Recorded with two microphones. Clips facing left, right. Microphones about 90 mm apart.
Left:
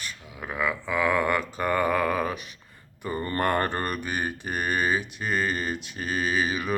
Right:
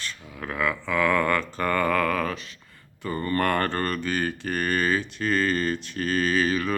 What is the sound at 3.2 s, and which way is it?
Mantra, 25° left (ahead or behind).